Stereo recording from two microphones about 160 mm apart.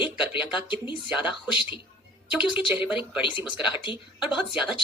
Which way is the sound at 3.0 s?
30° left (ahead or behind).